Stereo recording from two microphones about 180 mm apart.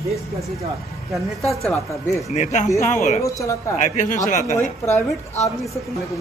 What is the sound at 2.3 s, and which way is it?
Speech, 40° left (ahead or behind).